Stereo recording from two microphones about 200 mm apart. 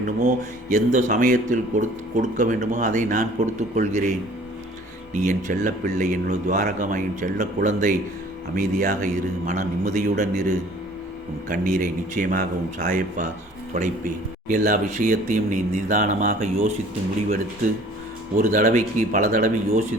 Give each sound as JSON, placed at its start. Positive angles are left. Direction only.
{"t": 0.2, "sound": "a man's voice", "side_deg": -40}
{"t": 18.3, "sound": "speech", "side_deg": -40}